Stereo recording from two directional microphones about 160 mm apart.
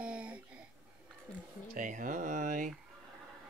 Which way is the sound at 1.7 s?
55° right (ahead or behind).